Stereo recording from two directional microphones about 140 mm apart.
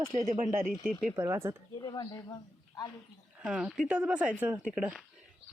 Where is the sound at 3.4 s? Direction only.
5° right (ahead or behind).